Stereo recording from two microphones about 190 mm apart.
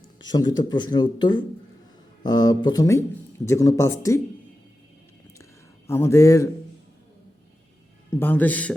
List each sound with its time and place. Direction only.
0.2 s speech: 20° left (ahead or behind)
5.9 s speech: 15° left (ahead or behind)
8.1 s speech: 10° left (ahead or behind)